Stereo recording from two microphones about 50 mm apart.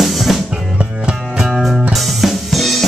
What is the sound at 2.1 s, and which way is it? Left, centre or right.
Drum kit, centre.